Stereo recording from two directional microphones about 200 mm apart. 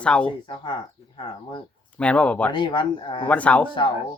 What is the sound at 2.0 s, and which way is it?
Speech, 5° left (ahead or behind).